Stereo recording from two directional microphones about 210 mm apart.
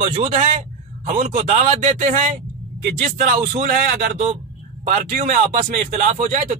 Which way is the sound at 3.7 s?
35° right (ahead or behind).